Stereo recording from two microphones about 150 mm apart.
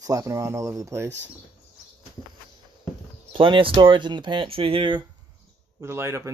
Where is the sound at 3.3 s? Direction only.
35° right (ahead or behind).